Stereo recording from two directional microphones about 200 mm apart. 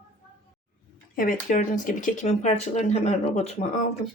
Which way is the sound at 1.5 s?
40° left (ahead or behind).